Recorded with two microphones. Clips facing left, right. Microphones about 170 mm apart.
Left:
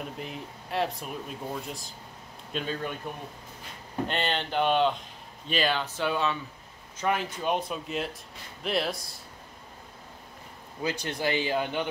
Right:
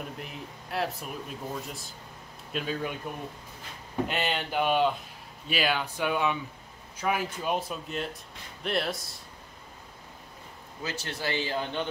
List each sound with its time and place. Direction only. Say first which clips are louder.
0.2 s speech: left 2 dB; centre (ahead or behind)
4.1 s speech: left 3 dB; 5° right (ahead or behind)
10.8 s speech: left 5 dB; 15° left (ahead or behind)